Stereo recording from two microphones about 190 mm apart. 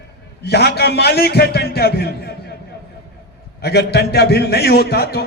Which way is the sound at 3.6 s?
60° left (ahead or behind).